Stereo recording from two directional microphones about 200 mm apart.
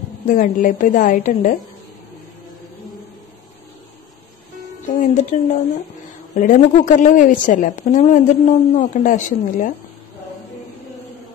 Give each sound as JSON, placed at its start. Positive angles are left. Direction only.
{"t": 0.3, "sound": "a woman's voice", "side_deg": 40}
{"t": 4.9, "sound": "a woman's voice", "side_deg": 35}